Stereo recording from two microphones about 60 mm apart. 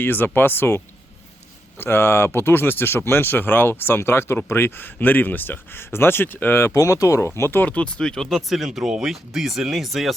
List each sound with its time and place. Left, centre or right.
0.0 s speech: left
1.8 s speech: left
6.7 s speech: left
7.3 s speech: left
7.6 s speech: left
8.0 s speech: centre